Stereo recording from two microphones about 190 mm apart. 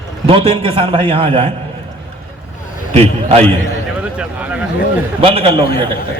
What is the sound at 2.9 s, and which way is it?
Speech, 35° right (ahead or behind).